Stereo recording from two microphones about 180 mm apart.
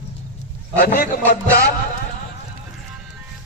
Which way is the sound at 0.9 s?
55° left (ahead or behind).